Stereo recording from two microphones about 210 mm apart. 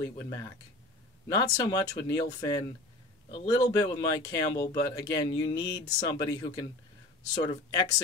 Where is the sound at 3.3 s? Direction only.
20° left (ahead or behind).